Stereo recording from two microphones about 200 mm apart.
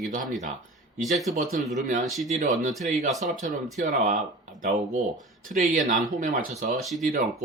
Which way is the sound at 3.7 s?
40° right (ahead or behind).